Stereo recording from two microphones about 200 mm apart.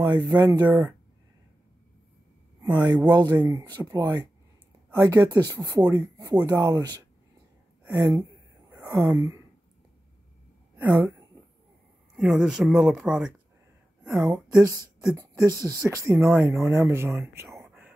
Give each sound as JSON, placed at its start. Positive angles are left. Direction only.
{"t": 0.0, "sound": "speech", "side_deg": -20}
{"t": 2.6, "sound": "speech", "side_deg": -20}
{"t": 7.8, "sound": "a sound", "side_deg": -15}
{"t": 10.8, "sound": "speech", "side_deg": -10}
{"t": 12.2, "sound": "speech", "side_deg": -5}